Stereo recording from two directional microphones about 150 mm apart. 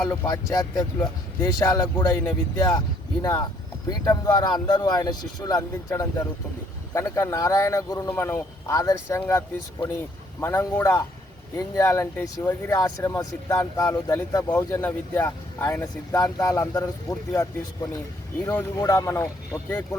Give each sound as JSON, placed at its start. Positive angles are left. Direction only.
{"t": 0.1, "sound": "speech", "side_deg": 20}